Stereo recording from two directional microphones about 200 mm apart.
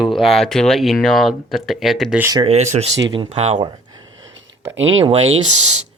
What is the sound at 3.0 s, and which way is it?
Speech, 20° right (ahead or behind).